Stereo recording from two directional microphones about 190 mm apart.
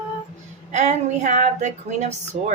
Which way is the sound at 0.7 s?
35° right (ahead or behind).